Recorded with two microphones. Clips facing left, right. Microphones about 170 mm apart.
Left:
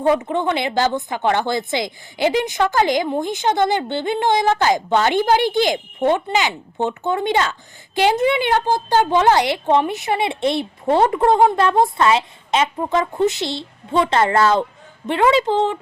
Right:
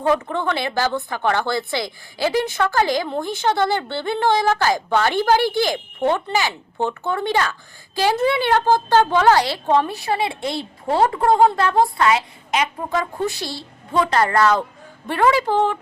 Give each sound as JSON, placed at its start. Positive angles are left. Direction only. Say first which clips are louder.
{"t": 0.1, "sound": "a woman's voice", "louder": "left 2 dB", "side_deg": 20}
{"t": 8.5, "sound": "speech", "louder": "right 2 dB", "side_deg": -45}
{"t": 8.9, "sound": "a woman's voice", "louder": "left 1 dB", "side_deg": 15}